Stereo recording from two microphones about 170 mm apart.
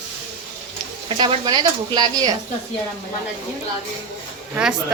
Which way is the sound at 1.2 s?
25° right (ahead or behind).